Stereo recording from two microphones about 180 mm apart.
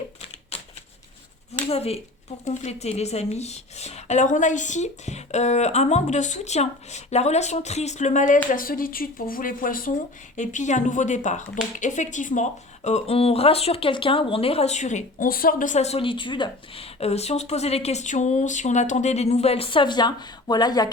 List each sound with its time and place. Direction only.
1.6 s speech: 35° left (ahead or behind)